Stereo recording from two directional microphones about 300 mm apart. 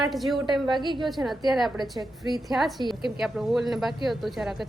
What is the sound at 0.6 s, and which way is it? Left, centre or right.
Speech, centre.